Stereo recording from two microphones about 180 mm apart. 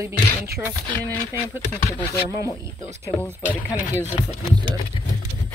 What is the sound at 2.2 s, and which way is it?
Speech, 15° right (ahead or behind).